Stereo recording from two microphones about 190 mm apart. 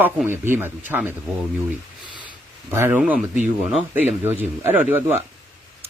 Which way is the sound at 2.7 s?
10° right (ahead or behind).